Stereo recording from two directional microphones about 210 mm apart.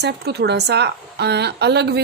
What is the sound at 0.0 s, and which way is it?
Speech, 50° right (ahead or behind).